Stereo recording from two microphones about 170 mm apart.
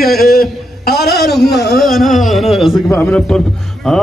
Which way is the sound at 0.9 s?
70° left (ahead or behind).